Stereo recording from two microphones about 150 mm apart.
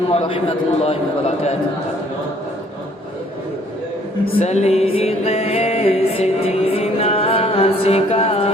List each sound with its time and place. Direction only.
0.1 s a man's voice: 40° left (ahead or behind)
4.3 s music: 45° left (ahead or behind)